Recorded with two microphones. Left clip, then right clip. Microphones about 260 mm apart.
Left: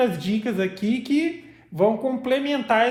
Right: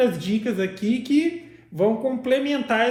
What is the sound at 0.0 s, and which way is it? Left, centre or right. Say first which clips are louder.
Speech: right 1 dB; left.